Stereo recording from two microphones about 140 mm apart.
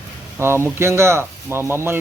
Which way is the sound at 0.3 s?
20° right (ahead or behind).